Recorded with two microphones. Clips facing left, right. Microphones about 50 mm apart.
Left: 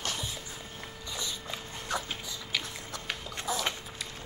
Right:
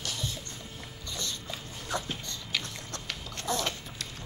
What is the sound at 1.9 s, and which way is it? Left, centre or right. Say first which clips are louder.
Dog: right 1 dB; centre.